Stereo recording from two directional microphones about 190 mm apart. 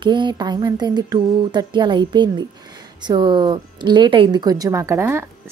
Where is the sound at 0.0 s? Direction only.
25° right (ahead or behind).